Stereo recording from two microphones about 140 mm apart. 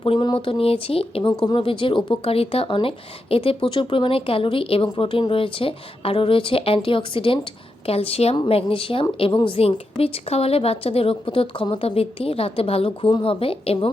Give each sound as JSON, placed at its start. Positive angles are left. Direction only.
{"t": 0.0, "sound": "a woman's voice", "side_deg": 35}